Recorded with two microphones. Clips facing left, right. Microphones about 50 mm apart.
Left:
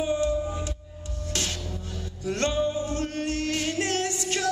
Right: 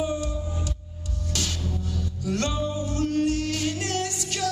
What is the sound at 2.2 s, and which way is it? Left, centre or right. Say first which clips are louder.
Music: left 2 dB; left.